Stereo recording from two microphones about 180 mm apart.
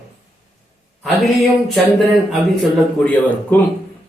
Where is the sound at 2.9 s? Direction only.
10° left (ahead or behind).